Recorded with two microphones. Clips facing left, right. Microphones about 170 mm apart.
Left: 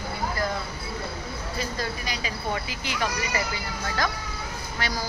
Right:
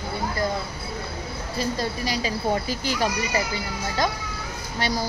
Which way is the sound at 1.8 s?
35° right (ahead or behind).